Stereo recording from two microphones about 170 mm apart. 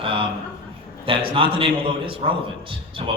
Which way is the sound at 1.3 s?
30° right (ahead or behind).